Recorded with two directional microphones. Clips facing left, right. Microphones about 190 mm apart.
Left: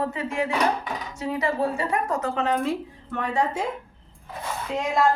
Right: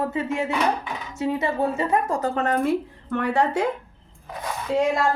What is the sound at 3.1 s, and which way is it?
Speech, 70° right (ahead or behind).